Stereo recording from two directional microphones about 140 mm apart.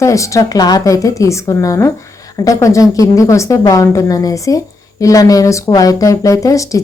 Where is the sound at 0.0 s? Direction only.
20° left (ahead or behind).